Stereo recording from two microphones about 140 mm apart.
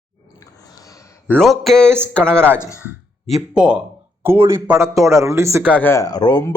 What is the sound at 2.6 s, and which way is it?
Speech, 20° left (ahead or behind).